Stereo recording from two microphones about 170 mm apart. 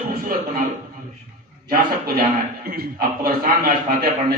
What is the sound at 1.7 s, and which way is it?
A man's voice, 60° right (ahead or behind).